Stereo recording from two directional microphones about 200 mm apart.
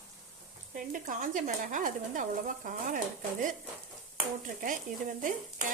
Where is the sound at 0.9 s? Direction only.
40° right (ahead or behind).